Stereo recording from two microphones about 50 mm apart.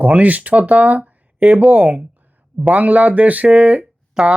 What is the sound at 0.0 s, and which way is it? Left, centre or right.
Speech, right.